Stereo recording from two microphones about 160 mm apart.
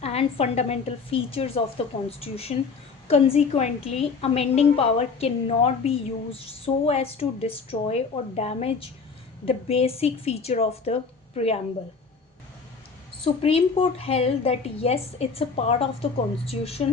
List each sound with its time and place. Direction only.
0.0 s a woman's voice: 40° left (ahead or behind)
13.2 s a woman's voice: 35° left (ahead or behind)